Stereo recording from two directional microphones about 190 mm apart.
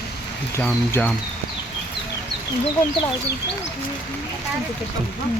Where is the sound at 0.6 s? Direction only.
10° left (ahead or behind).